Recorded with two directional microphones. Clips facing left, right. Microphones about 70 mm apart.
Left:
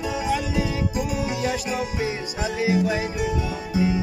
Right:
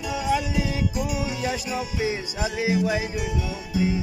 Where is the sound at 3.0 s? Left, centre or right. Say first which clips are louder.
Left 3 dB; left.